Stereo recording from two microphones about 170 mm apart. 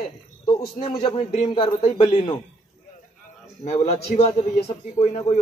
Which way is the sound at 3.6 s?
45° left (ahead or behind).